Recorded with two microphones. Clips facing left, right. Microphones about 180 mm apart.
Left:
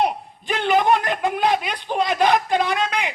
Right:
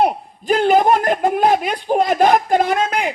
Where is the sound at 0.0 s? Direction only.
40° right (ahead or behind).